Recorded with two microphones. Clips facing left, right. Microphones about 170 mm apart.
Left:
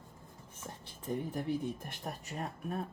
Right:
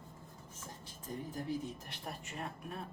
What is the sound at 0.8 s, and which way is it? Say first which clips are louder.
Speech: left 7 dB; 60° left (ahead or behind).